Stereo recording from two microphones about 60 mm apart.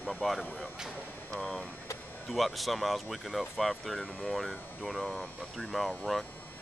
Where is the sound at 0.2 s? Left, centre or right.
Centre.